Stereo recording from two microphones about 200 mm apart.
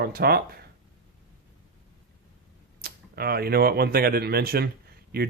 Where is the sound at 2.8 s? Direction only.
50° right (ahead or behind).